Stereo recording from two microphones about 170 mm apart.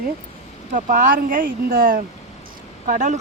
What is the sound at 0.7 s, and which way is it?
Speech, 50° right (ahead or behind).